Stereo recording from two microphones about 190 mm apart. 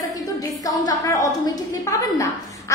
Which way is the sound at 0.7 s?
20° left (ahead or behind).